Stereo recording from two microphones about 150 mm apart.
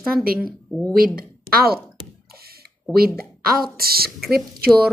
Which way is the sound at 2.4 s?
90° right.